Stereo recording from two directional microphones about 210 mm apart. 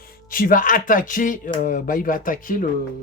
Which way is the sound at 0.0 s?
45° left (ahead or behind).